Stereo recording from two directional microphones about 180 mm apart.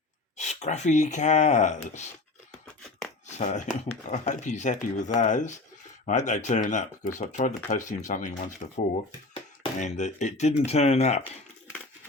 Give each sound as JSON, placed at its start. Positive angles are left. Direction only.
{"t": 0.3, "sound": "speech", "side_deg": 40}
{"t": 3.2, "sound": "speech", "side_deg": 40}